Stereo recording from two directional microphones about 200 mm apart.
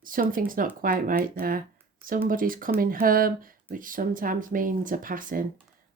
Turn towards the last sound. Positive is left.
turn(degrees=-45)  # may be behind; listen again after turning